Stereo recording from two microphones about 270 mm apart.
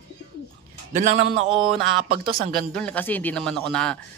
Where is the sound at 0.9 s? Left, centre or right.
Right.